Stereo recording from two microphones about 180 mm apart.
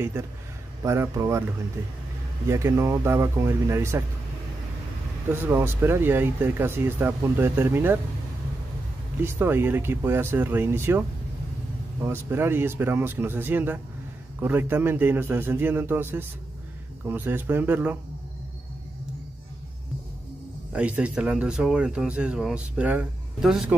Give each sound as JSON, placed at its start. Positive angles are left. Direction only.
{"t": 0.8, "sound": "speech", "side_deg": -15}
{"t": 2.4, "sound": "speech", "side_deg": -15}
{"t": 5.3, "sound": "speech", "side_deg": -10}
{"t": 9.2, "sound": "speech", "side_deg": -10}
{"t": 20.7, "sound": "speech", "side_deg": -5}